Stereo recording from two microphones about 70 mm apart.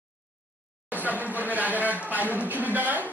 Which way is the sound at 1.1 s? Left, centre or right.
Right.